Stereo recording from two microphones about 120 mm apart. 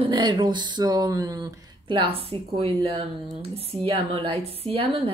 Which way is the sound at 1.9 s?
50° right (ahead or behind).